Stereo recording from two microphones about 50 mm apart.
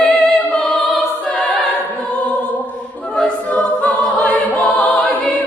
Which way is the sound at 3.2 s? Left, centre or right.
Left.